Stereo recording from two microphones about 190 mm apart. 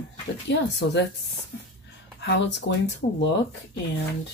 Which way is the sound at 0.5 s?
65° left (ahead or behind).